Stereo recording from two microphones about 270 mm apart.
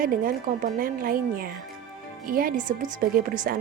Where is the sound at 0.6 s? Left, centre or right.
Right.